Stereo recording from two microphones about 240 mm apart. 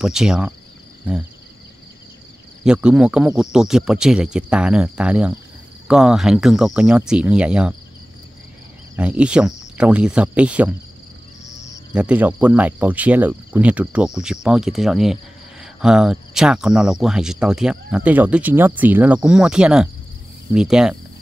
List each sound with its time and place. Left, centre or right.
0.0 s speech: centre
2.6 s speech: centre
8.9 s speech: centre
11.4 s cricket: left
11.9 s speech: centre